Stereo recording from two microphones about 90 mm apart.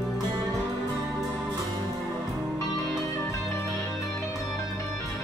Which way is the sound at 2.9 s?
35° left (ahead or behind).